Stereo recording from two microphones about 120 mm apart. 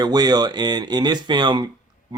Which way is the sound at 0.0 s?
35° right (ahead or behind).